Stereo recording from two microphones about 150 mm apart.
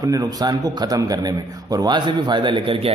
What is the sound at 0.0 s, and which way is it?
A man's voice, 25° right (ahead or behind).